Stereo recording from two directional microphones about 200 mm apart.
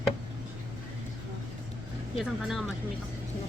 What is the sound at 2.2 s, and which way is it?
Vehicle, centre (ahead or behind).